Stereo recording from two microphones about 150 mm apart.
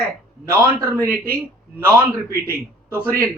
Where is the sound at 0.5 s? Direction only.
20° right (ahead or behind).